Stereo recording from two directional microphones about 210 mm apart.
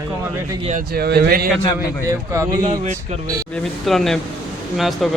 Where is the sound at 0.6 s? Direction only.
35° right (ahead or behind).